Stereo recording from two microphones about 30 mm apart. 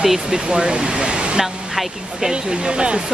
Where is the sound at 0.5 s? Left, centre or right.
Right.